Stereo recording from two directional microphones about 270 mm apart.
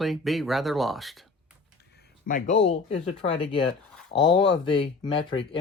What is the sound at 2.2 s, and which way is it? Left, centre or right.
Speech, left.